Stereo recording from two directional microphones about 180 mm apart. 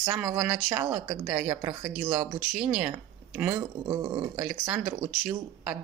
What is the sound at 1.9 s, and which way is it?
Speech, 5° right (ahead or behind).